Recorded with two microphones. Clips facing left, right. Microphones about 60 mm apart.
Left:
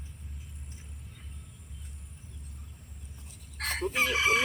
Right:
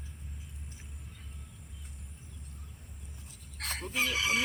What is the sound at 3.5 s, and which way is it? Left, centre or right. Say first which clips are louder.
Chicken: left 5 dB; left.